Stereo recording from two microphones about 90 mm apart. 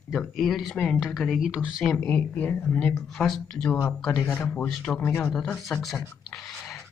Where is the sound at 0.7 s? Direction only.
15° left (ahead or behind).